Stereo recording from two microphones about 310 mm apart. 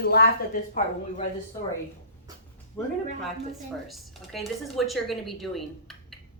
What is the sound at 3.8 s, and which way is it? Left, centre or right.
A woman's voice, centre.